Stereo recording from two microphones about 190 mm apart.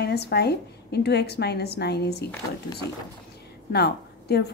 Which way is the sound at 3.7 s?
60° left (ahead or behind).